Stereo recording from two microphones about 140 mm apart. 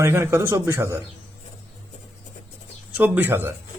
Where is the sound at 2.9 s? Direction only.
15° right (ahead or behind).